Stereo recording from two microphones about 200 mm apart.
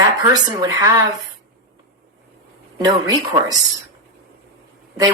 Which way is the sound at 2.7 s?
20° right (ahead or behind).